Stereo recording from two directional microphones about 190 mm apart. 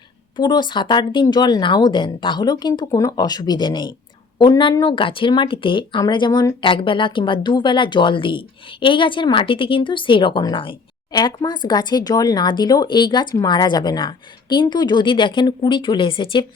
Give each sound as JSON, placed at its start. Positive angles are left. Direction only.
{"t": 0.3, "sound": "speech", "side_deg": 20}